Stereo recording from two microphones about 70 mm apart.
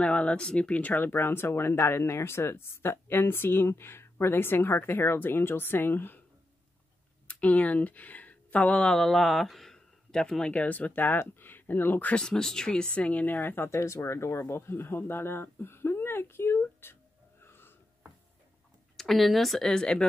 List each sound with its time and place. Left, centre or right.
0.0 s speech: centre
7.2 s speech: centre
12.2 s speech: centre; by 13.7 s left
13.7 s speech: left
17.4 s wheeze: left
18.9 s speech: centre